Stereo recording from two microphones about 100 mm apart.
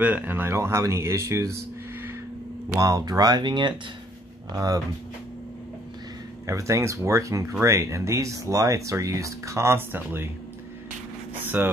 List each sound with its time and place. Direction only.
0.0 s speech: 15° right (ahead or behind)
2.8 s speech: 35° right (ahead or behind)
6.4 s speech: 30° right (ahead or behind)
11.6 s speech: 20° right (ahead or behind)